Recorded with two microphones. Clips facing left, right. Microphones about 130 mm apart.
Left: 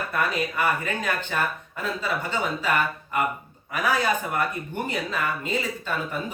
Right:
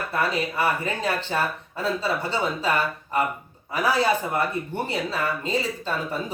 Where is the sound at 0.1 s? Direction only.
30° right (ahead or behind).